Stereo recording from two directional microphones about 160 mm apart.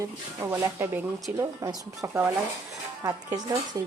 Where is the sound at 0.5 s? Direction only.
20° right (ahead or behind).